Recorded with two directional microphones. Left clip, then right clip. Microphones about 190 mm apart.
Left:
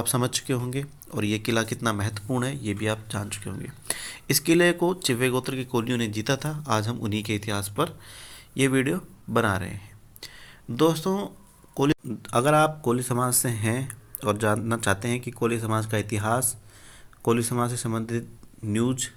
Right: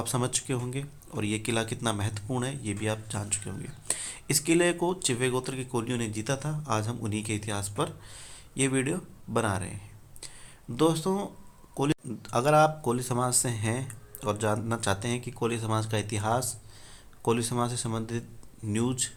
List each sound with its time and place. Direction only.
0.0 s speech: 15° left (ahead or behind)